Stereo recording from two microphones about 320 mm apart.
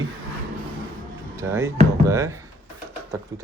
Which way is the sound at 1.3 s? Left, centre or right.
Centre.